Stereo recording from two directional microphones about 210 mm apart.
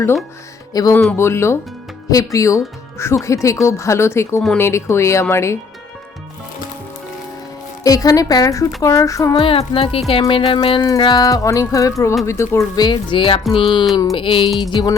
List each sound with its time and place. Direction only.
0.7 s speech: 15° left (ahead or behind)
7.9 s speech: 15° left (ahead or behind)